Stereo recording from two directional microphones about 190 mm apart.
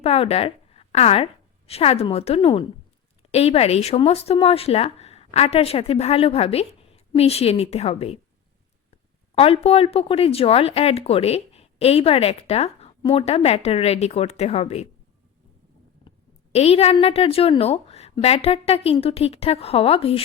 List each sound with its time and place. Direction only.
0.0 s a woman's voice: 30° left (ahead or behind)
9.3 s speech: 30° left (ahead or behind)
16.0 s speech: 35° left (ahead or behind)